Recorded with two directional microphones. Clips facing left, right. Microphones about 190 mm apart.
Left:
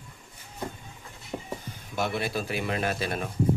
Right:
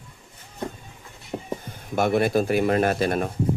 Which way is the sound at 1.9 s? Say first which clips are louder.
Right 9 dB; 50° right (ahead or behind).